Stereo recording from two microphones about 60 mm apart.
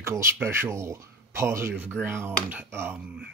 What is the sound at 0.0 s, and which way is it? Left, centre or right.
Speech, right.